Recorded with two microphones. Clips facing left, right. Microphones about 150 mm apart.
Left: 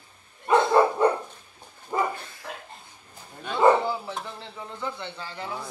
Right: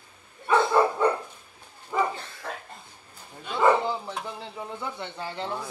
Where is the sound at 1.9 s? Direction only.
35° left (ahead or behind).